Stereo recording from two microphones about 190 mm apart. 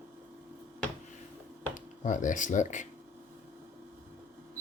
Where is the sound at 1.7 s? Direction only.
40° left (ahead or behind).